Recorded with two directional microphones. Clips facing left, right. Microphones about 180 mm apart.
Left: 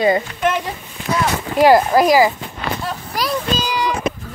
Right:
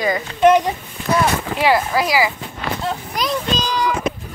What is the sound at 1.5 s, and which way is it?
Speech, 45° left (ahead or behind).